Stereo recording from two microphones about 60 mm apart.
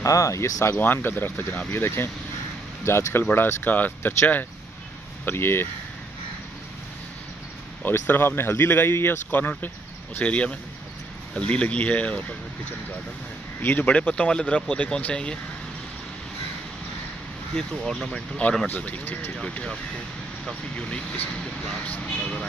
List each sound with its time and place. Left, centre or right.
0.0 s speech: left
0.7 s speech: left
2.8 s speech: left
3.3 s speech: left
5.2 s speech: left
7.8 s speech: left
10.1 s speech: left
13.6 s speech: left
17.6 s speech: centre
18.7 s speech: left
19.4 s speech: centre
22.2 s speech: centre